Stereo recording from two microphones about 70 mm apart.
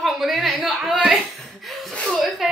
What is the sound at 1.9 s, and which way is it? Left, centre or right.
Chuckle, centre.